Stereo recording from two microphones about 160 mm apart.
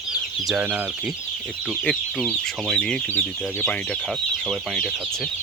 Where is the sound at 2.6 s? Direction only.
5° left (ahead or behind).